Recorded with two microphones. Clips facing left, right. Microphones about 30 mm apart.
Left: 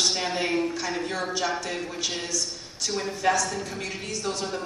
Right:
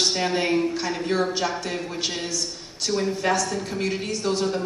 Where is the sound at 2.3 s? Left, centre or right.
Right.